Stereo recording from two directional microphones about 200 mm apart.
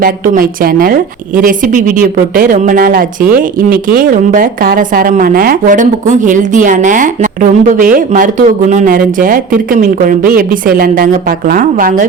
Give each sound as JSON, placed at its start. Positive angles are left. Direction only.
{"t": 0.0, "sound": "a woman's voice", "side_deg": -45}